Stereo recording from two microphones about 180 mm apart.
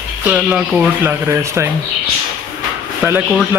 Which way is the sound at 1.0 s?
15° right (ahead or behind).